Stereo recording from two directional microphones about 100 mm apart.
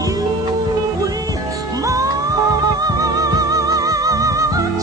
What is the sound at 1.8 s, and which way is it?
Music, 35° right (ahead or behind).